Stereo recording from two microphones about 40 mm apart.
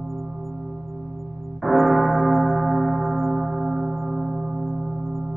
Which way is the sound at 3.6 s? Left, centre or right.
Centre.